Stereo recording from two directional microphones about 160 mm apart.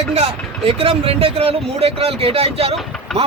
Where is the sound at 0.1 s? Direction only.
40° right (ahead or behind).